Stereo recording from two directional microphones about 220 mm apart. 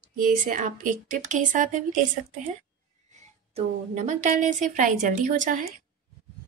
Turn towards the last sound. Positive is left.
turn(degrees=-35)  # may be behind; listen again after turning